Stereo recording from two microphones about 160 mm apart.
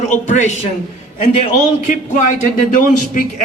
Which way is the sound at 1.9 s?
50° left (ahead or behind).